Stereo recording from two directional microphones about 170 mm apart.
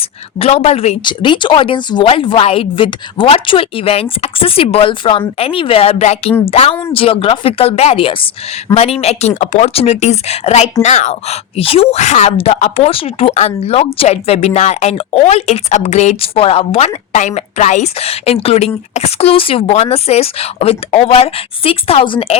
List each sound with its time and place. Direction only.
0.0 s speech: 35° left (ahead or behind)